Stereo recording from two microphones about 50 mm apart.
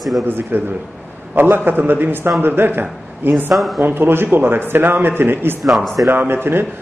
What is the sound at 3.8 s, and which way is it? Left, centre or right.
A man's voice, right.